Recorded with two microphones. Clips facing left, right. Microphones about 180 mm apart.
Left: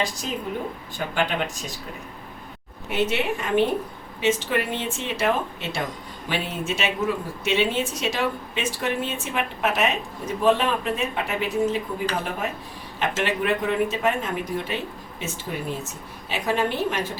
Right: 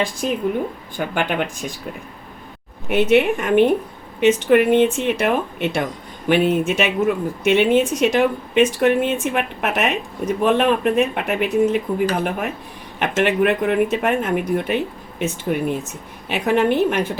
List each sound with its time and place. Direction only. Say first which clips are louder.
0.0 s a woman's voice: right 7 dB; 55° right (ahead or behind)
2.9 s a woman's voice: right 9 dB; 60° right (ahead or behind)